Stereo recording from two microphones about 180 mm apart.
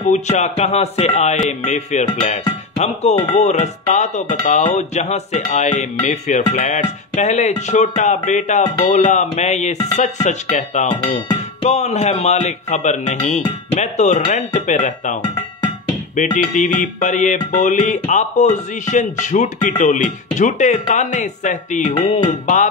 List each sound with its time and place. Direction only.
0.0 s music: 40° left (ahead or behind)
16.2 s music: 45° left (ahead or behind)